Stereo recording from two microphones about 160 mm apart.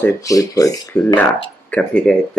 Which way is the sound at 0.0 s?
20° left (ahead or behind).